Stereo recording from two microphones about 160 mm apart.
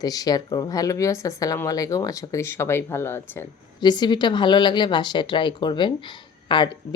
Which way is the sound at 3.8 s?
25° left (ahead or behind).